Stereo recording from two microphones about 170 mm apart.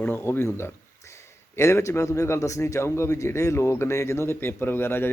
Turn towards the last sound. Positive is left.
turn(degrees=15)  # may be behind; listen again after turning